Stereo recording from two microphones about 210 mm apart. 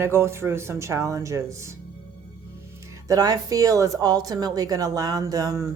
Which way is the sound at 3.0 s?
15° right (ahead or behind).